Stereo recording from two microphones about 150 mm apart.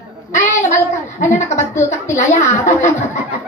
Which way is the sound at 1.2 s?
55° left (ahead or behind).